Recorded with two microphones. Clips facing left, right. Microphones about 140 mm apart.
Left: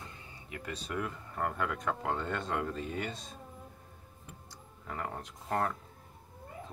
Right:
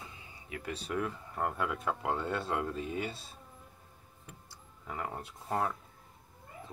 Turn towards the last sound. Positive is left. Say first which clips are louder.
# left 1 dB
turn(degrees=-5)  # may be behind; listen again after turning